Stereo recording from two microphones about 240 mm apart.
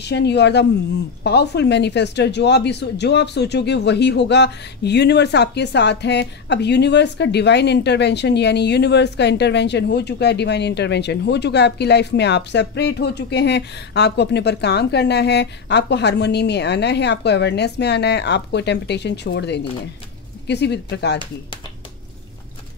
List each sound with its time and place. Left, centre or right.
0.0 s speech: left